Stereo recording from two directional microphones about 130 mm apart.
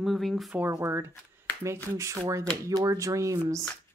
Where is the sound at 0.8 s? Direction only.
20° right (ahead or behind).